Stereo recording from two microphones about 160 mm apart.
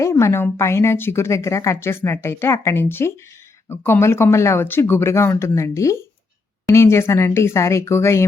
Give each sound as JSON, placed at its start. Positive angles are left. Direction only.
{"t": 0.0, "sound": "a woman's voice", "side_deg": 15}